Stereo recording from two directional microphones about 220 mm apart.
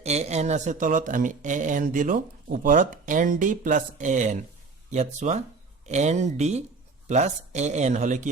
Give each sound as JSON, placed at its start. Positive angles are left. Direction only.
{"t": 0.0, "sound": "speech", "side_deg": -30}